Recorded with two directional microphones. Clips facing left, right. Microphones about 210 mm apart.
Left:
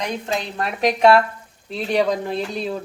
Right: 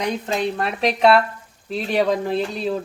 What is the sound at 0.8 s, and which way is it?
Speech, 30° right (ahead or behind).